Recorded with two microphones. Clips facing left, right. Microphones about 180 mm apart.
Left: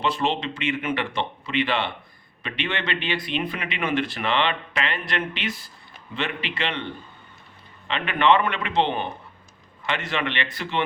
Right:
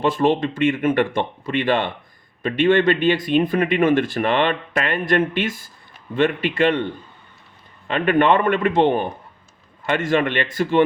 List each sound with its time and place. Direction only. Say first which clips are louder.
0.0 s speech: right 7 dB; 50° right (ahead or behind)
7.9 s speech: right 4 dB; 50° right (ahead or behind)